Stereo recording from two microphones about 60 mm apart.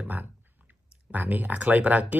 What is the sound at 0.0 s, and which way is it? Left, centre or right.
Speech, right.